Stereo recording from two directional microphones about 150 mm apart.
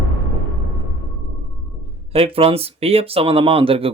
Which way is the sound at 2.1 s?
40° right (ahead or behind).